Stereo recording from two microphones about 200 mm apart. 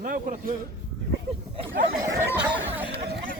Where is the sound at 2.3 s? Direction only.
10° right (ahead or behind).